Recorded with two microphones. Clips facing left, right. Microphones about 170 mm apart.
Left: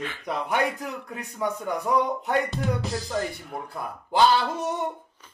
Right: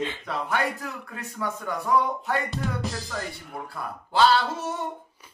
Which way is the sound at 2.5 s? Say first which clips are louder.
Left 2 dB; centre (ahead or behind).